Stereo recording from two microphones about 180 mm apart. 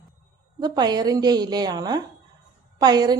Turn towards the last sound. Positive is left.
turn(degrees=-25)  # may be behind; listen again after turning